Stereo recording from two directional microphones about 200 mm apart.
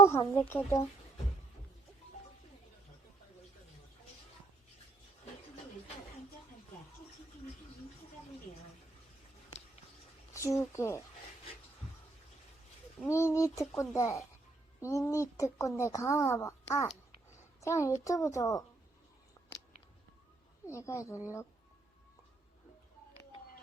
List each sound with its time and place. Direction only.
0.0 s a woman's voice: 15° left (ahead or behind)
10.3 s a woman's voice: 15° left (ahead or behind)
13.1 s a woman's voice: 15° left (ahead or behind)
20.7 s a woman's voice: 15° left (ahead or behind)